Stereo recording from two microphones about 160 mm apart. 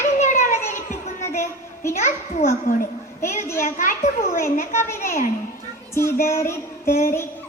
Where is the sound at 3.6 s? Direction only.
55° left (ahead or behind).